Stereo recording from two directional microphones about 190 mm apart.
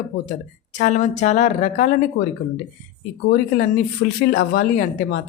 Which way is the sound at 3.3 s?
45° left (ahead or behind).